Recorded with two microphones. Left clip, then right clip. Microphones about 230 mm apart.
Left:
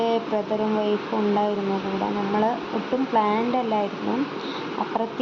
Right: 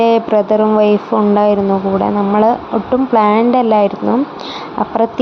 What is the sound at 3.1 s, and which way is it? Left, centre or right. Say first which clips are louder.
Speech: right 11 dB; right.